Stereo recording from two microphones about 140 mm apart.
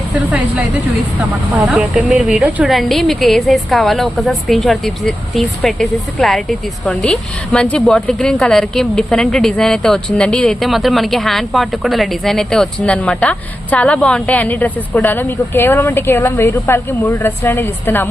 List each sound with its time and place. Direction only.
0.3 s a woman's voice: 10° right (ahead or behind)
1.6 s a woman's voice: 5° right (ahead or behind); by 18.1 s 15° left (ahead or behind)